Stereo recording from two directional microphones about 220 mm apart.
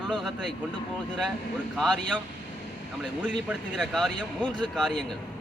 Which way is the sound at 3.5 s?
Centre (ahead or behind).